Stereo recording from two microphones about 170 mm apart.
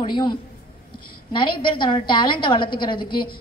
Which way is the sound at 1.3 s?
30° left (ahead or behind).